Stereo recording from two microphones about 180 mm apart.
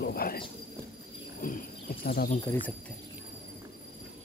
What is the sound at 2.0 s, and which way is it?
Speech, 60° left (ahead or behind).